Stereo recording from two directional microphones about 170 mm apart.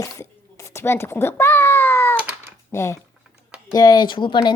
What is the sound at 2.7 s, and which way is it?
Speech, 15° left (ahead or behind).